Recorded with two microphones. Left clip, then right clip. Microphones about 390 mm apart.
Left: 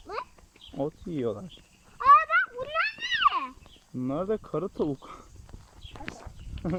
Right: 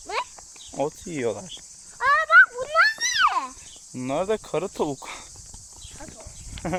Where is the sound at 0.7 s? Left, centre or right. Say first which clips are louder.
Right 5 dB; right.